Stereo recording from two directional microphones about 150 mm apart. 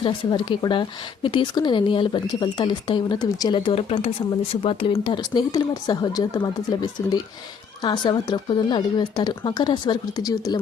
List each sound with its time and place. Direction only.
0.0 s a woman's voice: 30° left (ahead or behind)